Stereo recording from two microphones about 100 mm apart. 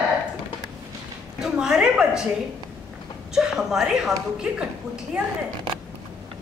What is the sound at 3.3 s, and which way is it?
Speech, 5° right (ahead or behind).